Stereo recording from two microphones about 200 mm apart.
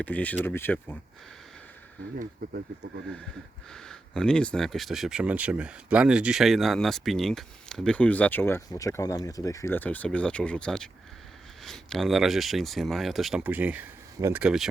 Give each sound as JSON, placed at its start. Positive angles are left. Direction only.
{"t": 0.0, "sound": "speech", "side_deg": 10}
{"t": 2.1, "sound": "speech", "side_deg": -50}
{"t": 3.7, "sound": "speech", "side_deg": 5}